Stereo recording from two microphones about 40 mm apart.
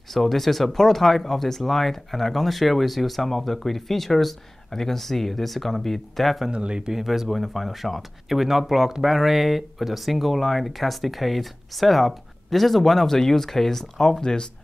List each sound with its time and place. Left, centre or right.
0.1 s speech: centre
6.5 s speech: right
6.9 s speech: centre